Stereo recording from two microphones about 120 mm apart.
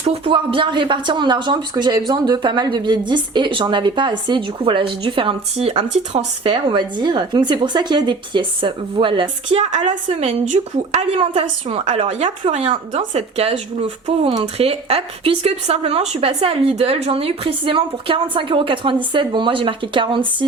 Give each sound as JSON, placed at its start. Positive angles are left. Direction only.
{"t": 0.0, "sound": "speech", "side_deg": -50}
{"t": 5.5, "sound": "a woman's voice", "side_deg": -65}
{"t": 6.5, "sound": "speech", "side_deg": -40}
{"t": 9.6, "sound": "a woman's voice", "side_deg": -65}
{"t": 13.3, "sound": "a woman's voice", "side_deg": -55}